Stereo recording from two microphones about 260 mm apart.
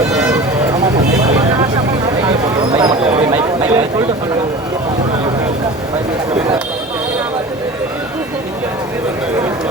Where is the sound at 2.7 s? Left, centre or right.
Right.